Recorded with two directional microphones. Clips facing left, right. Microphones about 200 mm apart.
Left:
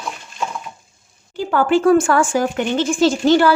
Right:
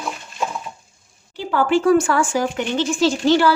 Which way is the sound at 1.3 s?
50° left (ahead or behind).